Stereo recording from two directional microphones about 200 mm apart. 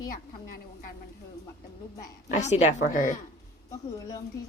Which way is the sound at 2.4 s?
35° left (ahead or behind).